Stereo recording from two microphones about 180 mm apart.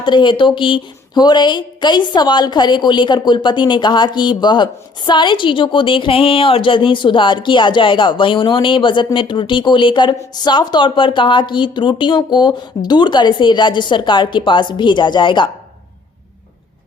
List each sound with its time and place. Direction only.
0.0 s a woman's voice: 25° left (ahead or behind)